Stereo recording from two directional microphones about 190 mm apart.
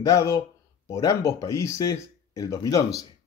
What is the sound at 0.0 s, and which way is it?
Speech, 15° left (ahead or behind).